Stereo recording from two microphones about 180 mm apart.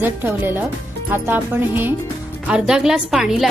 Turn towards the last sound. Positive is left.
turn(degrees=-5)  # may be behind; listen again after turning